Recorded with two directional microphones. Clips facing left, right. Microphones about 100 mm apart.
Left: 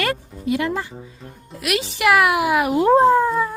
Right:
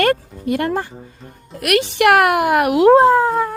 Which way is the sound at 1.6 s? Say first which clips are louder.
Right 6 dB; 60° right (ahead or behind).